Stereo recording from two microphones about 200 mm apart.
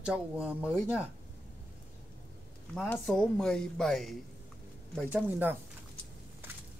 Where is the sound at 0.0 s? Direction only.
5° right (ahead or behind).